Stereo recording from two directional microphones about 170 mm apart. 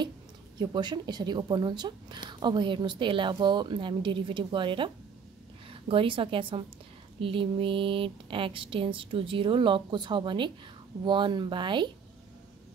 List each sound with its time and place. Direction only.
0.6 s a woman's voice: 25° right (ahead or behind)